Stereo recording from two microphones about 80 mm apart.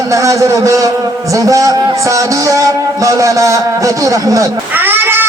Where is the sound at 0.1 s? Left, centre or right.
Right.